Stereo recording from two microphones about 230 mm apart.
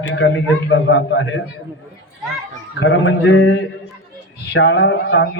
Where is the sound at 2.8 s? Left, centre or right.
Left.